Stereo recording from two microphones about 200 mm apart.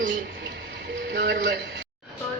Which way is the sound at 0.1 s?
60° right (ahead or behind).